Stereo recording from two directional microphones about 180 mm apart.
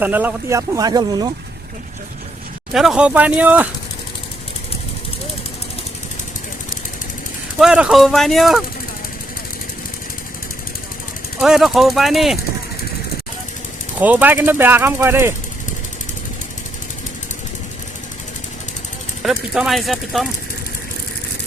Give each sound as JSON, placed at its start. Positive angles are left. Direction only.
{"t": 0.0, "sound": "speech", "side_deg": -10}
{"t": 2.7, "sound": "speech", "side_deg": -5}
{"t": 7.6, "sound": "speech", "side_deg": -5}
{"t": 11.3, "sound": "speech", "side_deg": -5}
{"t": 14.0, "sound": "speech", "side_deg": -10}
{"t": 19.2, "sound": "speech", "side_deg": 0}